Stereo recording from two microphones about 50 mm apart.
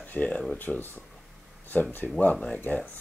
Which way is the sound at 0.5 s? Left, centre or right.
Left.